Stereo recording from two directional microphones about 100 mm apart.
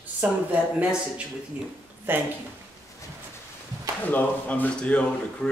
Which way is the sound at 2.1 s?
20° right (ahead or behind).